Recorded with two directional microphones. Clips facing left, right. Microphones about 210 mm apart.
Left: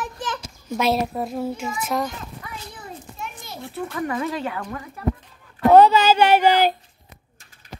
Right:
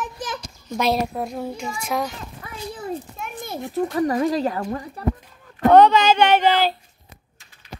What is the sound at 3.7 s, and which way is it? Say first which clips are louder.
Speech: right 6 dB; 35° right (ahead or behind).